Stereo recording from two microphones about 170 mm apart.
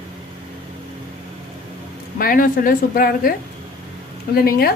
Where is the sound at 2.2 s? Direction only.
55° left (ahead or behind).